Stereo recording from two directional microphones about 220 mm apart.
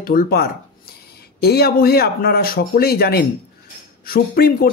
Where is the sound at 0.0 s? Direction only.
45° left (ahead or behind).